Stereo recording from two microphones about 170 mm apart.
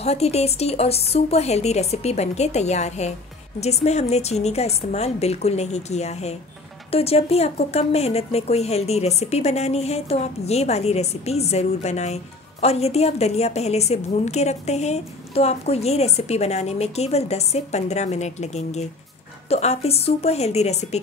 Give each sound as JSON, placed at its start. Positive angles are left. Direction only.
{"t": 0.0, "sound": "speech", "side_deg": 40}